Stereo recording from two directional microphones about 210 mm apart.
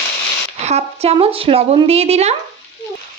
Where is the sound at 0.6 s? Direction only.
30° right (ahead or behind).